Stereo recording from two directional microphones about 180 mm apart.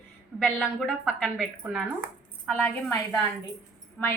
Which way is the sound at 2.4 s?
10° left (ahead or behind).